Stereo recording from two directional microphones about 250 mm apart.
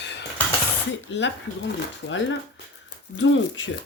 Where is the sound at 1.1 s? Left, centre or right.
Left.